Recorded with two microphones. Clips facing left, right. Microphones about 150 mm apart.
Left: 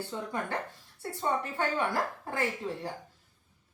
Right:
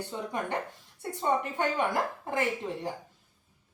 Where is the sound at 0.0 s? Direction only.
20° right (ahead or behind).